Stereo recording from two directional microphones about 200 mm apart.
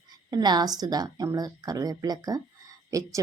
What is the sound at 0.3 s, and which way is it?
A woman's voice, 20° right (ahead or behind).